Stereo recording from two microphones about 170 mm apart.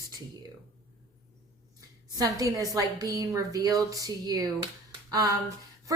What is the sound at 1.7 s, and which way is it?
A woman's voice, 20° right (ahead or behind).